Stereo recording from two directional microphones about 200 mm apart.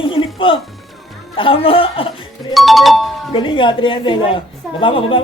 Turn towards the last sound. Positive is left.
turn(degrees=25)  # may be behind; listen again after turning